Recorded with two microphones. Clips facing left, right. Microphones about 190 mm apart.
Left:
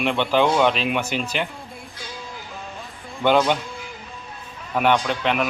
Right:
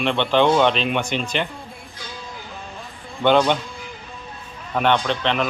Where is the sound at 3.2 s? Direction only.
5° left (ahead or behind).